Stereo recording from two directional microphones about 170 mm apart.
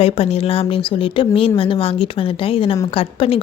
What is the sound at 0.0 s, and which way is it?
A woman's voice, 35° left (ahead or behind).